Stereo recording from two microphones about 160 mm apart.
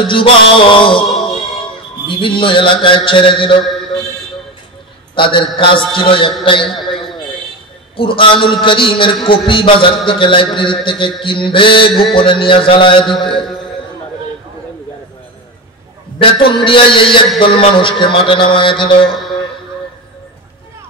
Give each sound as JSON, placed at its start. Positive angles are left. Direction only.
{"t": 0.0, "sound": "a man's voice", "side_deg": 35}
{"t": 2.0, "sound": "a man's voice", "side_deg": 30}
{"t": 5.1, "sound": "a man's voice", "side_deg": 30}
{"t": 6.7, "sound": "a sound", "side_deg": 0}
{"t": 7.9, "sound": "a man's voice", "side_deg": 30}
{"t": 13.0, "sound": "a man's voice", "side_deg": 0}
{"t": 16.6, "sound": "a man's voice", "side_deg": 30}